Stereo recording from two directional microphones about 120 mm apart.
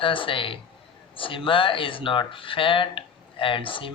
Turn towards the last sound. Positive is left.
turn(degrees=45)  # may be behind; listen again after turning